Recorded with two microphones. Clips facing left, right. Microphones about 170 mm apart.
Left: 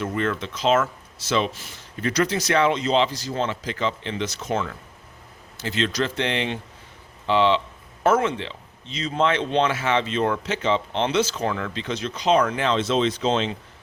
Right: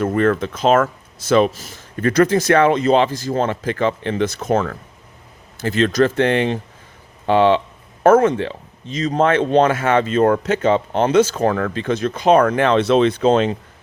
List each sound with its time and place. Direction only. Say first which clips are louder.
0.0 s speech: right 8 dB; 50° right (ahead or behind)